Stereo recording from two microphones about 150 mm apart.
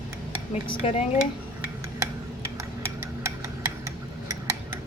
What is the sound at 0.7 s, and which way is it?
Speech, 40° left (ahead or behind).